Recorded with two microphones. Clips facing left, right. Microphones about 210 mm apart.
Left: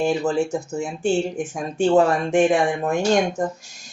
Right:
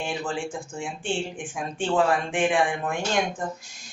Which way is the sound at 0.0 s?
40° left (ahead or behind).